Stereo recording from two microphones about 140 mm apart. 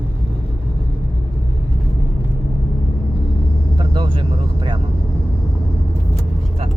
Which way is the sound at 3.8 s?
35° right (ahead or behind).